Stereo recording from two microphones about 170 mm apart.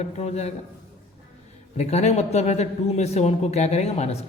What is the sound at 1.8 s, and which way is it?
Speech, 40° left (ahead or behind).